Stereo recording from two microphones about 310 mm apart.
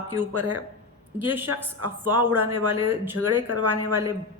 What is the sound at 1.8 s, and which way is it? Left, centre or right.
A woman's voice, right.